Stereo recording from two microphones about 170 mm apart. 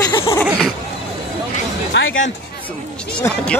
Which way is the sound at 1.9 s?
90° left.